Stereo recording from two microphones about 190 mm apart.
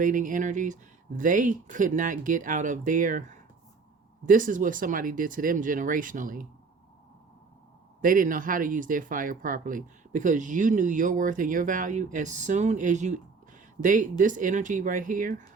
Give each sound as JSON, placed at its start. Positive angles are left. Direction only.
{"t": 0.0, "sound": "speech", "side_deg": -45}
{"t": 8.0, "sound": "speech", "side_deg": -45}